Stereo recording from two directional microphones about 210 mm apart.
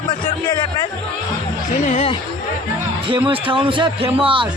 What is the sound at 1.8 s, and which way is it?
Speech, 30° left (ahead or behind).